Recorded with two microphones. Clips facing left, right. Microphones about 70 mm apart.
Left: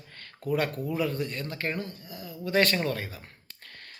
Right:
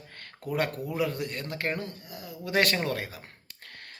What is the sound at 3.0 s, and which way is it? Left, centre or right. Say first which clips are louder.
Speech: right 1 dB; right.